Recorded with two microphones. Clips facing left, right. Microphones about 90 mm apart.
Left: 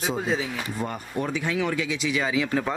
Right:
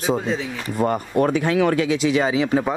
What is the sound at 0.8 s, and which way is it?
Speech, 65° right (ahead or behind).